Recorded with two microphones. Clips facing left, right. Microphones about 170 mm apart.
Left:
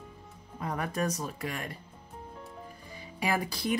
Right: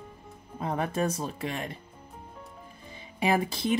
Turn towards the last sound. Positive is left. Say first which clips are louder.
# right 4 dB
turn(degrees=-25)  # may be behind; listen again after turning